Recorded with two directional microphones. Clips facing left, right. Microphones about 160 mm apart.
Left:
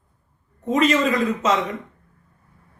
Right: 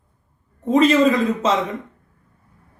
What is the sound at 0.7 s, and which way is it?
Speech, 30° right (ahead or behind).